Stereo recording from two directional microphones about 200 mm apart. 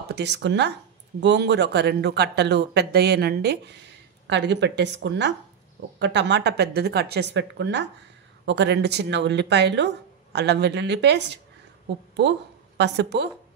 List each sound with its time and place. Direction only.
0.1 s a woman's voice: 60° right (ahead or behind)